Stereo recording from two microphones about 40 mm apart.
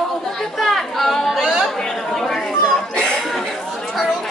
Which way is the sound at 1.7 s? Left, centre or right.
Centre.